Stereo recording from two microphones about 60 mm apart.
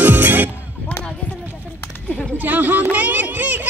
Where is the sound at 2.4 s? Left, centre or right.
Right.